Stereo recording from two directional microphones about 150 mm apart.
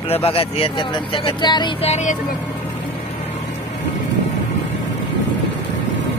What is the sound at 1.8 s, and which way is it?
Speech, 50° left (ahead or behind).